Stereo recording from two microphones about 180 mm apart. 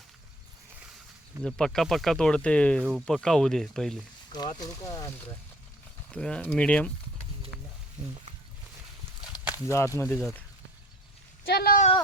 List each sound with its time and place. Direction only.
1.4 s speech: 5° left (ahead or behind)
4.3 s speech: 25° left (ahead or behind)
6.1 s speech: 5° left (ahead or behind)
9.4 s a sound: 10° right (ahead or behind)
9.6 s speech: 15° left (ahead or behind)
11.4 s speech: 60° left (ahead or behind)